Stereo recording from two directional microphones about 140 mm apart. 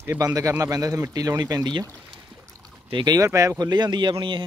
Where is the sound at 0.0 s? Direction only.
20° right (ahead or behind).